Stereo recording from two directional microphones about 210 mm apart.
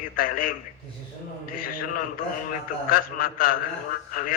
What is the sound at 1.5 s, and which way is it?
A man's voice, 45° left (ahead or behind).